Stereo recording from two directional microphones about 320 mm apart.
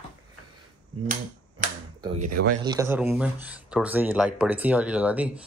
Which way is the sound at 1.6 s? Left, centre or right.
Right.